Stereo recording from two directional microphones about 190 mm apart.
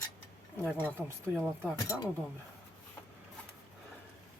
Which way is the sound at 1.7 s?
20° left (ahead or behind).